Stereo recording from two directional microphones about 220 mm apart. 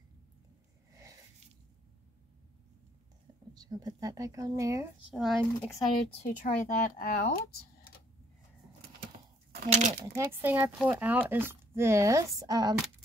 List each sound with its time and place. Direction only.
3.5 s speech: 20° right (ahead or behind)
5.2 s speech: centre (ahead or behind)
6.1 s speech: 30° left (ahead or behind)
9.6 s speech: 35° right (ahead or behind)
10.1 s speech: 10° right (ahead or behind)